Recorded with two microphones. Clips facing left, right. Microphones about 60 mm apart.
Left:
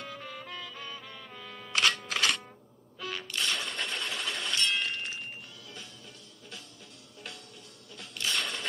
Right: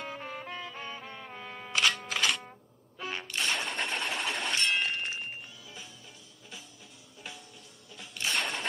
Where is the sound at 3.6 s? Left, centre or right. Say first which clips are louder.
Right 2 dB; right.